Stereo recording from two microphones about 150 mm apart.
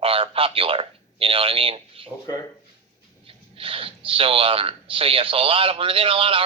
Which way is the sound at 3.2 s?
40° right (ahead or behind).